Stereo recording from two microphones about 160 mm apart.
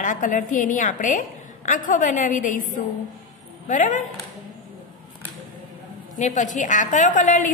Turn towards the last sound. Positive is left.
turn(degrees=55)  # may be behind; listen again after turning